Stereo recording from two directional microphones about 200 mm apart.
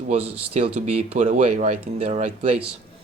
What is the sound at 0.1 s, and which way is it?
Speech, 30° right (ahead or behind).